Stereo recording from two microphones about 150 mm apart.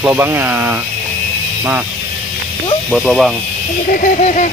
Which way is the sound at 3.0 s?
Centre (ahead or behind).